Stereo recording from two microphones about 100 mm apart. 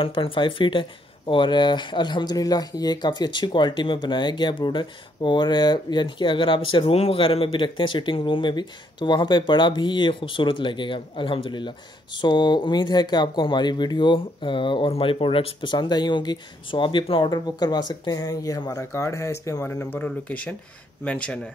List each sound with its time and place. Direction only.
0.0 s speech: 60° left (ahead or behind); by 21.4 s 10° left (ahead or behind)